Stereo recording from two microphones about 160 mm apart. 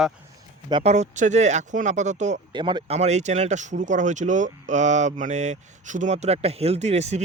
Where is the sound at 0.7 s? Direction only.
30° right (ahead or behind).